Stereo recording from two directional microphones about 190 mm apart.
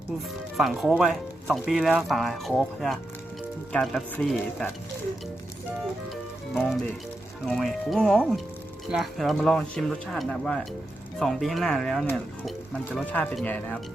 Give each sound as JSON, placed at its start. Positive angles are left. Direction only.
{"t": 0.5, "sound": "speech", "side_deg": 0}
{"t": 6.5, "sound": "speech", "side_deg": 0}